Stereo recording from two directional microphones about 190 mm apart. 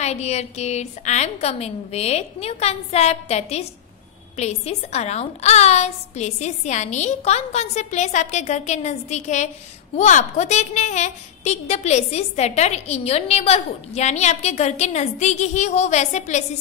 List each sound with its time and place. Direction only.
0.0 s a woman's voice: 35° left (ahead or behind)